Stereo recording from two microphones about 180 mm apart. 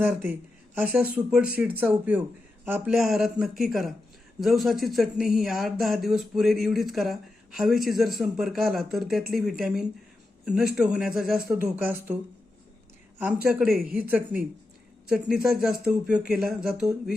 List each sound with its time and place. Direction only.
0.0 s speech: 10° right (ahead or behind)
13.1 s speech: 10° right (ahead or behind)
13.7 s speech: 55° right (ahead or behind)
13.9 s speech: 10° right (ahead or behind)